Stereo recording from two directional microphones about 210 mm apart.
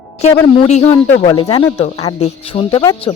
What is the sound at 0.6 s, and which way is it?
Speech, 30° left (ahead or behind).